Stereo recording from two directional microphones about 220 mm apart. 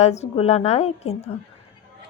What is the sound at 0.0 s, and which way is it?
Speech, 30° left (ahead or behind).